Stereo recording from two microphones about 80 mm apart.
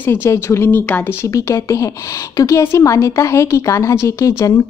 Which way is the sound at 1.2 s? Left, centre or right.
Left.